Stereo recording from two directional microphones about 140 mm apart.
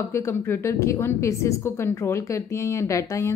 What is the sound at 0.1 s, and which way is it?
A woman's voice, 15° left (ahead or behind).